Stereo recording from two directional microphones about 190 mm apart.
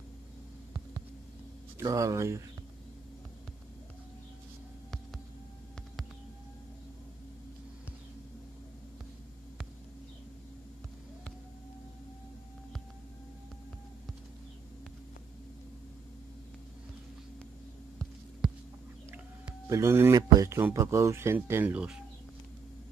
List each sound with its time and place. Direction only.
1.8 s speech: 15° right (ahead or behind)
19.7 s speech: 15° right (ahead or behind)